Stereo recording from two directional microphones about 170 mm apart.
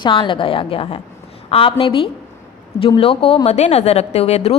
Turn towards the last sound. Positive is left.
turn(degrees=35)  # may be behind; listen again after turning